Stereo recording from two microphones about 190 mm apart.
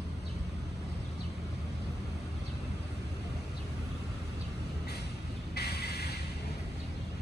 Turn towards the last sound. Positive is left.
turn(degrees=60)  # may be behind; listen again after turning